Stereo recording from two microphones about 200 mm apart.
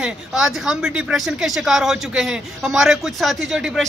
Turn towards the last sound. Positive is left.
turn(degrees=0)  # may be behind; listen again after turning